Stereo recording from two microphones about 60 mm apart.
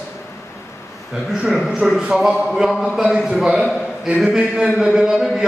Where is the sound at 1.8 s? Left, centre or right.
Centre.